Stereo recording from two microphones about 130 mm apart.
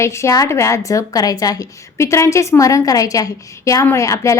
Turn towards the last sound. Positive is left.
turn(degrees=25)  # may be behind; listen again after turning